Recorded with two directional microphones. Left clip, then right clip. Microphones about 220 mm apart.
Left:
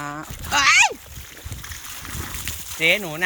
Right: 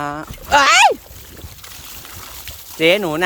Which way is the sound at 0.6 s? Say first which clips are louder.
Right 4 dB; 15° right (ahead or behind).